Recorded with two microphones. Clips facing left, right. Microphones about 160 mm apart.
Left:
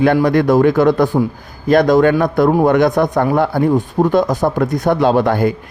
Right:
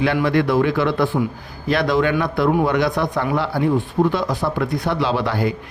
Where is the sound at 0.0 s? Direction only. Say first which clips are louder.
Left 6 dB; 45° left (ahead or behind).